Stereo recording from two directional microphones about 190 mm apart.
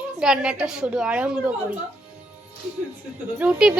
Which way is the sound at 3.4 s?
5° right (ahead or behind).